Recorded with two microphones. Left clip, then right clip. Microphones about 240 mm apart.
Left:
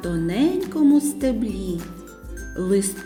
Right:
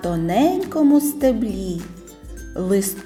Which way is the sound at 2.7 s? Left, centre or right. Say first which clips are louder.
Right 1 dB; centre.